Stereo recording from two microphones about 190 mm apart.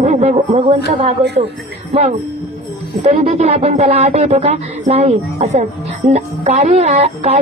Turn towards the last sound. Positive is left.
turn(degrees=-35)  # may be behind; listen again after turning